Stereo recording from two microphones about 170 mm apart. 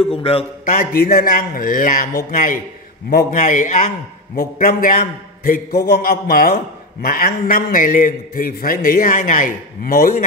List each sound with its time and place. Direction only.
0.0 s a man's voice: 35° left (ahead or behind)
0.7 s a man's voice: 55° left (ahead or behind)